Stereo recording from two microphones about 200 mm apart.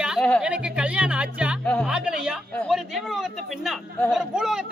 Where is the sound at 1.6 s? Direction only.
5° left (ahead or behind).